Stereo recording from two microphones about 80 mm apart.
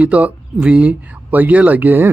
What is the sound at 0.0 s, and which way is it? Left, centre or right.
Speech, centre.